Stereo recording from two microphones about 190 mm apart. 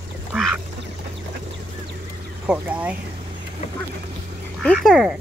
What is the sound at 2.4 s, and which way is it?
Speech, 5° right (ahead or behind).